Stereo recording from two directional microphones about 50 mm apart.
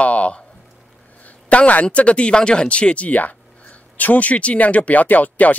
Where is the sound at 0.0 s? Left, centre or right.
Left.